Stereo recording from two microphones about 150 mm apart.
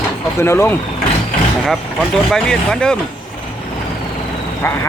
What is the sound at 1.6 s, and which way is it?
Speech, centre (ahead or behind).